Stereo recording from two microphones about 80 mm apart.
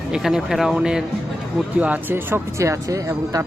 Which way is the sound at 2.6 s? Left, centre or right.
Right.